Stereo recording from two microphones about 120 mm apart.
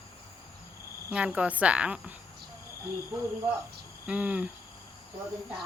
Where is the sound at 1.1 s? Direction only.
10° right (ahead or behind).